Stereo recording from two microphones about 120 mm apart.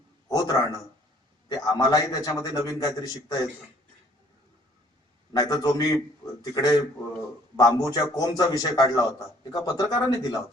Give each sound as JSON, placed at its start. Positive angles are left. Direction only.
{"t": 0.3, "sound": "a sound", "side_deg": 30}
{"t": 1.5, "sound": "a man's voice", "side_deg": 35}
{"t": 5.3, "sound": "a man's voice", "side_deg": 35}